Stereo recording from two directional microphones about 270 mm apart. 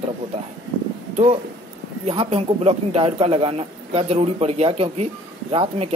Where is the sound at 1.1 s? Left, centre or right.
Right.